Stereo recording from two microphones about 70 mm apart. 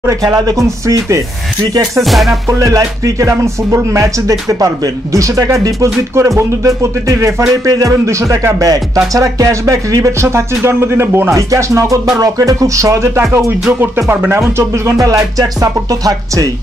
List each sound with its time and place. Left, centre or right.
0.6 s music: right
2.0 s music: centre
2.4 s music: right
13.7 s music: right
14.6 s music: right